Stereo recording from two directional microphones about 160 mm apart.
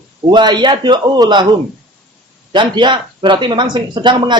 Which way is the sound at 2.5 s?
30° right (ahead or behind).